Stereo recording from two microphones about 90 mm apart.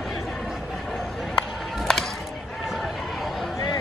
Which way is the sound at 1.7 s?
5° left (ahead or behind).